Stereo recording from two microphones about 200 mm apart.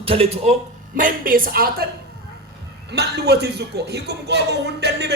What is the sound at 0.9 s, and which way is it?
Speech, 45° right (ahead or behind).